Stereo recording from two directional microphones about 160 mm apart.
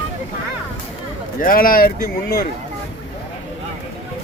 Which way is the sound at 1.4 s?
60° left (ahead or behind).